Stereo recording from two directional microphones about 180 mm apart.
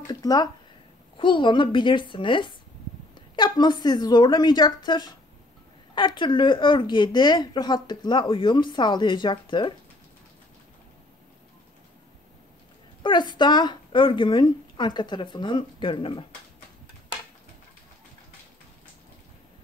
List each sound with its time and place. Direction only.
0.1 s a woman's voice: 20° left (ahead or behind)
13.0 s a woman's voice: 25° left (ahead or behind)